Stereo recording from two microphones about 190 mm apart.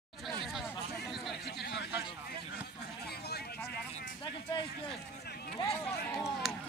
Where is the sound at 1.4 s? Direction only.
60° left (ahead or behind).